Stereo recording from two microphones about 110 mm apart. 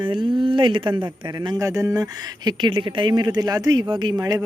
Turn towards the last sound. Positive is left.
turn(degrees=-35)  # may be behind; listen again after turning